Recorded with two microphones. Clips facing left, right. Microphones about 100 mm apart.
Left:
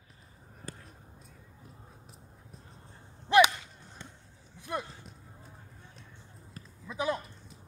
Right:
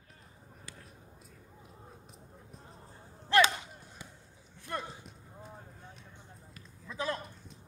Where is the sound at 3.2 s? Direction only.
15° left (ahead or behind).